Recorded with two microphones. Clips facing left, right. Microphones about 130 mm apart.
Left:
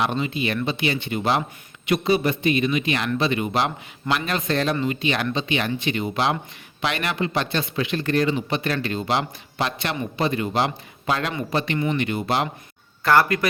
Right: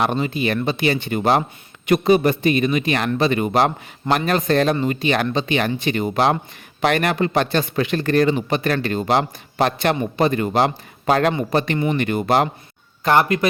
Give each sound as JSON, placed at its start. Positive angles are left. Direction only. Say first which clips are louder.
{"t": 0.0, "sound": "speech", "louder": "right 3 dB", "side_deg": -45}
{"t": 13.0, "sound": "speech", "louder": "right 2 dB", "side_deg": -20}